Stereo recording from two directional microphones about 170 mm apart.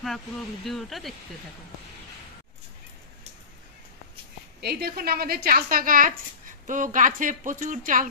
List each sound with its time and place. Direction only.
0.7 s speech: centre (ahead or behind)
4.6 s a woman's voice: 70° right (ahead or behind); by 8.1 s 50° right (ahead or behind)